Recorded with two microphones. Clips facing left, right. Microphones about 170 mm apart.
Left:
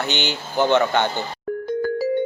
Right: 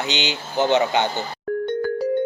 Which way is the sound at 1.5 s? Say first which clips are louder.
Right 3 dB; centre (ahead or behind).